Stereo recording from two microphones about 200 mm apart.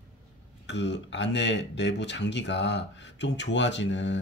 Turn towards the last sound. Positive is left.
turn(degrees=65)  # may be behind; listen again after turning